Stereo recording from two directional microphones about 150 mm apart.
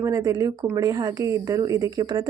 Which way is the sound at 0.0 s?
20° right (ahead or behind).